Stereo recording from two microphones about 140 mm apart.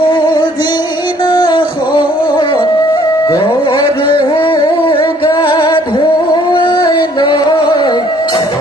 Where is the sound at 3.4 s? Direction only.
35° left (ahead or behind).